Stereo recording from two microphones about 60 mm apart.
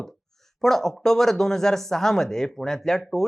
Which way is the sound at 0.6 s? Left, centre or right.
Centre.